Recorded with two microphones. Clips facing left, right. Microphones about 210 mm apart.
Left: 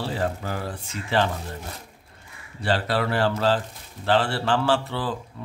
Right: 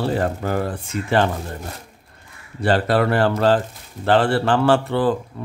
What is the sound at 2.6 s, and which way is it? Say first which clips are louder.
Speech: right 6 dB; 50° right (ahead or behind).